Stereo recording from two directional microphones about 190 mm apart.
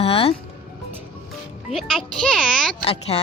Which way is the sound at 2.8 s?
30° left (ahead or behind).